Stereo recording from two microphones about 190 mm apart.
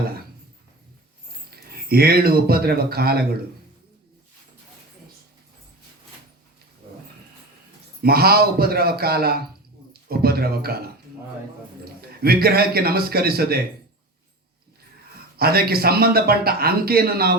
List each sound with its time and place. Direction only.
1.9 s a man's voice: 55° right (ahead or behind)
8.0 s a man's voice: 55° right (ahead or behind)
9.9 s a sound: 55° right (ahead or behind)
12.2 s a man's voice: 55° right (ahead or behind)
15.4 s a man's voice: 55° right (ahead or behind)